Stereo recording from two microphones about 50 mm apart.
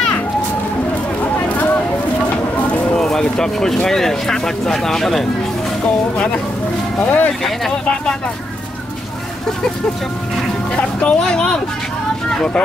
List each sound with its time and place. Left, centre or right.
3.0 s speech: centre
7.1 s speech: left
10.8 s speech: left
11.1 s speech: centre